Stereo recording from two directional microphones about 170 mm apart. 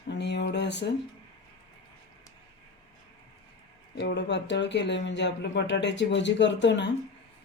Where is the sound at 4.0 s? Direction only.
90° left.